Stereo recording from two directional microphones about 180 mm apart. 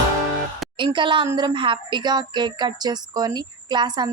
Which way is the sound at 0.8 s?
25° right (ahead or behind).